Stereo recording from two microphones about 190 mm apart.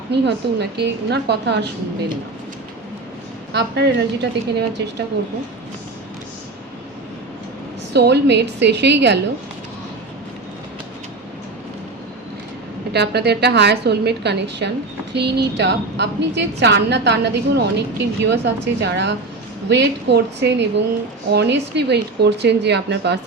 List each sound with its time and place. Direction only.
0.1 s a woman's voice: 60° right (ahead or behind)
3.5 s a woman's voice: 60° right (ahead or behind)
7.9 s a woman's voice: 60° right (ahead or behind)
12.9 s a woman's voice: 60° right (ahead or behind)